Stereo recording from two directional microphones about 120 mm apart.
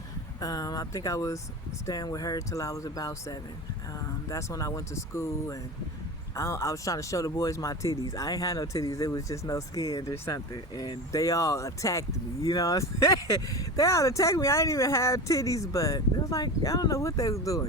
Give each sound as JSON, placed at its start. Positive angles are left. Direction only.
{"t": 0.3, "sound": "speech", "side_deg": 30}